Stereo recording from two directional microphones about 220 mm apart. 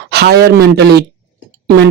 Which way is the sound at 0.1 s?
50° right (ahead or behind).